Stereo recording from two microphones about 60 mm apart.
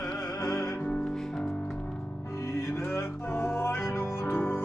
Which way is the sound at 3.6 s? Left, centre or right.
Left.